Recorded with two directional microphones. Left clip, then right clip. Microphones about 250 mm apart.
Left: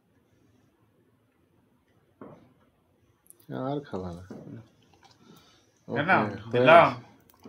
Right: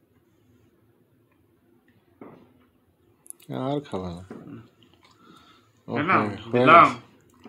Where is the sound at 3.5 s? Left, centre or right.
Right.